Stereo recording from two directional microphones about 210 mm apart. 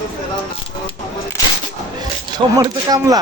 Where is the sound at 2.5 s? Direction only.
20° right (ahead or behind).